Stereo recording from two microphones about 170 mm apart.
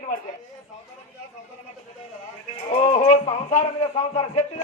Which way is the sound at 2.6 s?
40° left (ahead or behind).